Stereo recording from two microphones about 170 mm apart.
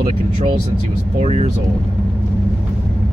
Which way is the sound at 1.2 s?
40° right (ahead or behind).